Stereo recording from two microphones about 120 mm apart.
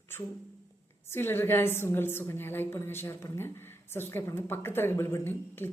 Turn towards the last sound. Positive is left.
turn(degrees=20)  # may be behind; listen again after turning